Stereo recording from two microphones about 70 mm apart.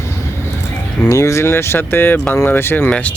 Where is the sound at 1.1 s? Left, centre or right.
Left.